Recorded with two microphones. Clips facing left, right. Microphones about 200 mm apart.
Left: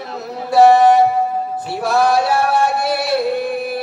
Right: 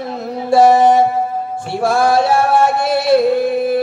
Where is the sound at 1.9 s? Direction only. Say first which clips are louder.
Even; 50° right (ahead or behind).